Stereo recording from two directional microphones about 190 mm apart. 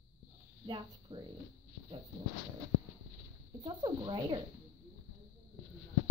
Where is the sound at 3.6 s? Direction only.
25° right (ahead or behind).